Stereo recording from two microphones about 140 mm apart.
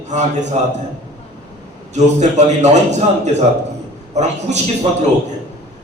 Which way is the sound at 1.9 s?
55° right (ahead or behind).